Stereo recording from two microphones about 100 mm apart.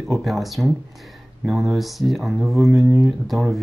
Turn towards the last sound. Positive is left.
turn(degrees=-5)  # may be behind; listen again after turning